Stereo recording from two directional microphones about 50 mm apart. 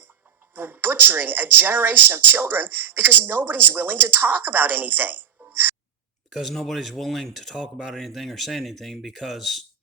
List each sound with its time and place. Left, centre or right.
0.5 s speech: right
6.3 s speech: centre